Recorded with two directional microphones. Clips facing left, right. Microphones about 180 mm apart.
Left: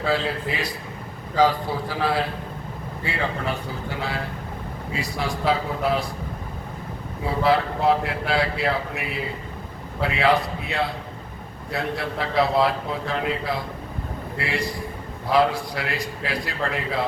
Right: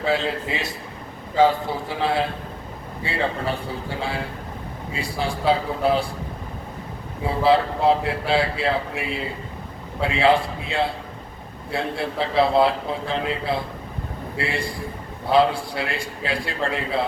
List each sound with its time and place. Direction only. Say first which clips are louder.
0.0 s a man's voice: right 1 dB; 25° right (ahead or behind)
4.9 s a man's voice: right 1 dB; 30° right (ahead or behind)
7.4 s a man's voice: right 2 dB; 30° right (ahead or behind)